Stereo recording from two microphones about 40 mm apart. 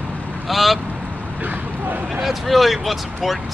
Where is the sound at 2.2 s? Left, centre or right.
Centre.